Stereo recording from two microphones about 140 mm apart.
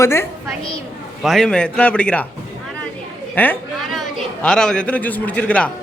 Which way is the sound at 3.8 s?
Centre (ahead or behind).